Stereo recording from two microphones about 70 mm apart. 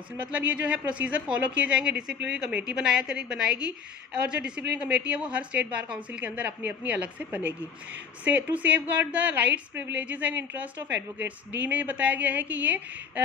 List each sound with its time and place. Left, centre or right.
0.2 s a woman's voice: right